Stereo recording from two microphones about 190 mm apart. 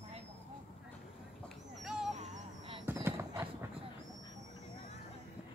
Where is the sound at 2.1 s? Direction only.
40° right (ahead or behind).